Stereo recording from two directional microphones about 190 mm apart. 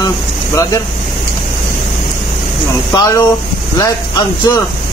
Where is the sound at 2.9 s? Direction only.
20° left (ahead or behind).